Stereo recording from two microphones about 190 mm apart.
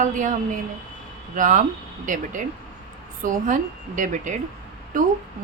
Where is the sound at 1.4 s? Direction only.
45° right (ahead or behind).